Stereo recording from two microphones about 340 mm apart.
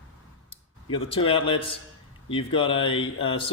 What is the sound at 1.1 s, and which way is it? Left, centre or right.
Speech, centre.